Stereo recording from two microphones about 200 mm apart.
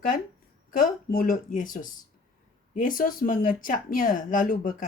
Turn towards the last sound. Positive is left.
turn(degrees=40)  # may be behind; listen again after turning